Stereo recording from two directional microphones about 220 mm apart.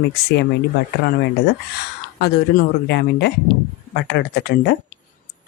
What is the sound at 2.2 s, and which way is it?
Speech, 50° left (ahead or behind).